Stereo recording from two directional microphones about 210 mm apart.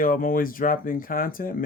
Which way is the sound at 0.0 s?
40° left (ahead or behind).